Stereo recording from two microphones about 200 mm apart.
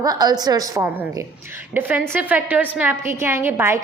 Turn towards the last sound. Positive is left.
turn(degrees=-10)  # may be behind; listen again after turning